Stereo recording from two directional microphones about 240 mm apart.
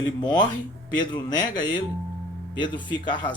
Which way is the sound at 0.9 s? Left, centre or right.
Centre.